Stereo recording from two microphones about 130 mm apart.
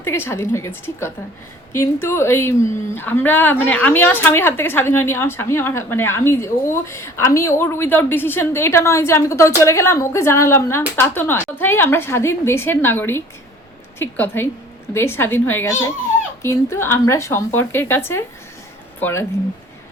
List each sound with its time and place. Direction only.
0.0 s a woman's voice: 20° left (ahead or behind)